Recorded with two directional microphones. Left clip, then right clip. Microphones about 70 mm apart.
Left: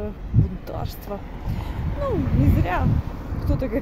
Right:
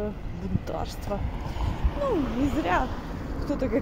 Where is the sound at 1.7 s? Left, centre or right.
Right.